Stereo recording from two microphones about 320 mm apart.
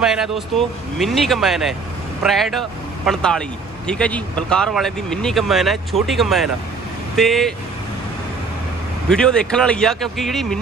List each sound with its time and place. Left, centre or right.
0.0 s speech: centre
9.1 s speech: centre